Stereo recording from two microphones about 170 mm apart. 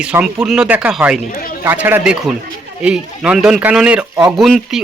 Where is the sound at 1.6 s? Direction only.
10° right (ahead or behind).